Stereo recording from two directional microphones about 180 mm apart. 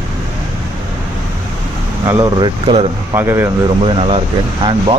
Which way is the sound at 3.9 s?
35° right (ahead or behind).